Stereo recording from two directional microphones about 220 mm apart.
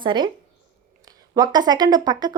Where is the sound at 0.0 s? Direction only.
20° right (ahead or behind).